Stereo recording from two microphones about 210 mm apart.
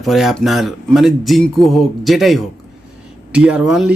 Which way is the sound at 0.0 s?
Centre (ahead or behind).